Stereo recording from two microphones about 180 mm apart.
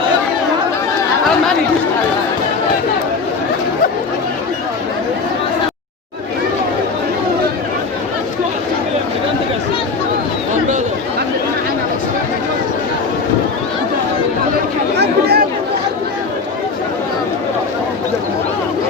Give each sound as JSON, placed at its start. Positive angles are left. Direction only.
{"t": 14.9, "sound": "chatter", "side_deg": -65}